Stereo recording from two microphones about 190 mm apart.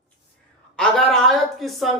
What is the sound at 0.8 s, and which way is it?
A man's voice, centre (ahead or behind).